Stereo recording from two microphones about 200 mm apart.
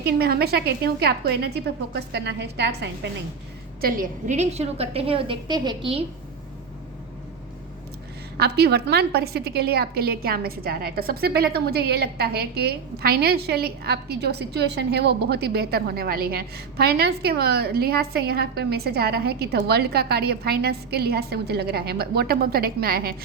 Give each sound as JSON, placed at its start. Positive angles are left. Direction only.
{"t": 0.0, "sound": "a woman's voice", "side_deg": -50}
{"t": 3.8, "sound": "a woman's voice", "side_deg": -45}
{"t": 8.4, "sound": "a woman's voice", "side_deg": -55}